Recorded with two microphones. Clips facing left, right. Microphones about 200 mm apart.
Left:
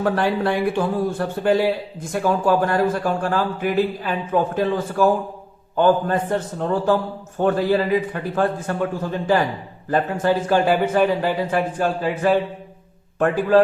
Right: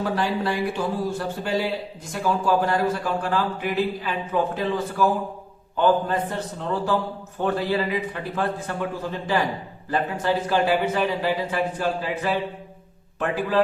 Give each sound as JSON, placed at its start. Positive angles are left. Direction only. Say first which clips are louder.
{"t": 0.0, "sound": "a man's voice", "louder": "left 4 dB", "side_deg": 55}